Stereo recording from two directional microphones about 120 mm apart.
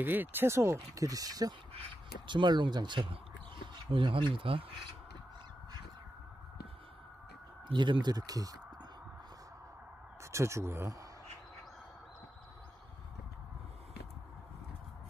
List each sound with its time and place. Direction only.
0.0 s speech: 15° right (ahead or behind); by 4.6 s 50° right (ahead or behind)
7.6 s speech: 40° right (ahead or behind)
10.3 s speech: 25° right (ahead or behind)